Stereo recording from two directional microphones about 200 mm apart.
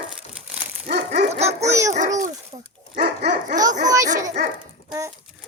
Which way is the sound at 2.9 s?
55° right (ahead or behind).